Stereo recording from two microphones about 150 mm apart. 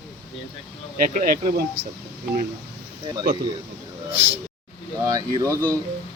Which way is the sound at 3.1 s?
30° right (ahead or behind).